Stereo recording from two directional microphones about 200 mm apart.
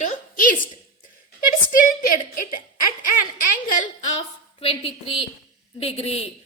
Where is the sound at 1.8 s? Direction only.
45° left (ahead or behind).